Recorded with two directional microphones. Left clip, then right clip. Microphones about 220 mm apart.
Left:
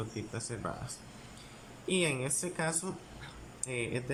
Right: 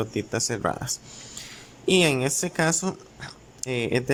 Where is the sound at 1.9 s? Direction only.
50° right (ahead or behind).